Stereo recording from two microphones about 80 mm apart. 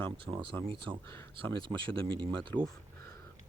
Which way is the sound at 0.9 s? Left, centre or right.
Right.